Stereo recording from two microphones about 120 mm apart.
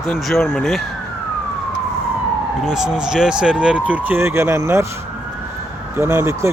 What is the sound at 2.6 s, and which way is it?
Speech, 5° right (ahead or behind).